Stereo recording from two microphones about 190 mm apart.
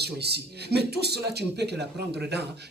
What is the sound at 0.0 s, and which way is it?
Speech, 60° right (ahead or behind).